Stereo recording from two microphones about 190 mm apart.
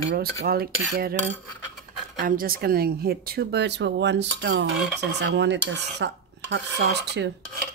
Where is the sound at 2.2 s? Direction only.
50° right (ahead or behind).